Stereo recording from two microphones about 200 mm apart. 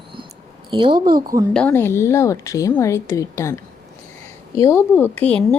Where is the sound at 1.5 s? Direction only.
5° left (ahead or behind).